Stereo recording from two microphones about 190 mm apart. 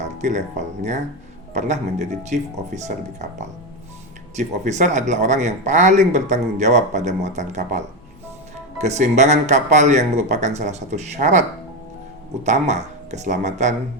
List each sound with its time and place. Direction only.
0.0 s speech: 40° right (ahead or behind)
4.4 s speech: 40° right (ahead or behind)